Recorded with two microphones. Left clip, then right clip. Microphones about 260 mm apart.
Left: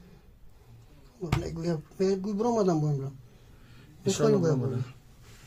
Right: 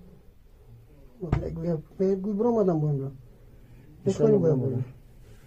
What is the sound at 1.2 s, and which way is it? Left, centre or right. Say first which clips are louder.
Speech: right 1 dB; left.